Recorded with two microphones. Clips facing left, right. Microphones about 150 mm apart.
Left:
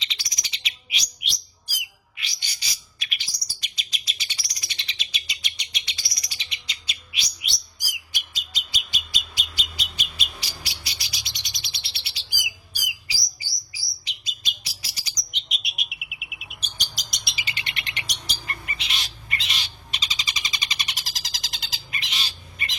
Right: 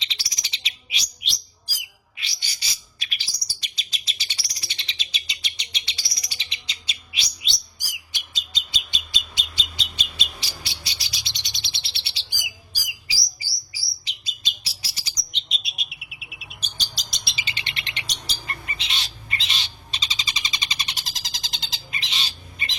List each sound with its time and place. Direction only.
0.0 s bird: 30° right (ahead or behind)
7.4 s chirp: 25° right (ahead or behind)
8.5 s bird: 25° right (ahead or behind)
14.0 s chirp: 30° right (ahead or behind)
15.4 s bird: 30° right (ahead or behind)